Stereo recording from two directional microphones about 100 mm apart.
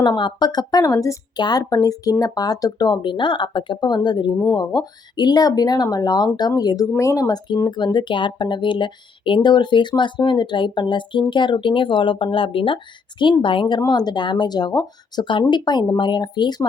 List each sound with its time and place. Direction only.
0.0 s speech: 45° left (ahead or behind)
7.9 s speech: 55° left (ahead or behind)